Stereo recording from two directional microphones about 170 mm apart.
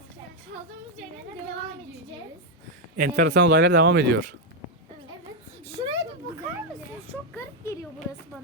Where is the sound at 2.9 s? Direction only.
65° right (ahead or behind); by 4.2 s 90° right.